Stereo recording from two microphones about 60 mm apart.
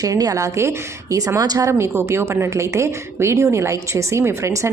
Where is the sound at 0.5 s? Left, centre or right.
Right.